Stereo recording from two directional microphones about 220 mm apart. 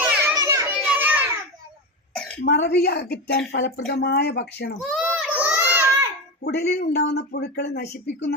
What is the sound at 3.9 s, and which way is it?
Speech, 45° left (ahead or behind).